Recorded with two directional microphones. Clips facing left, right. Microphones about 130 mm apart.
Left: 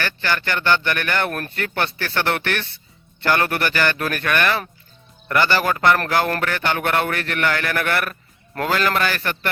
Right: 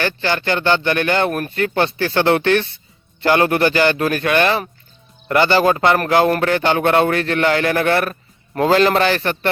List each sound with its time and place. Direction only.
0.0 s speech: 20° right (ahead or behind)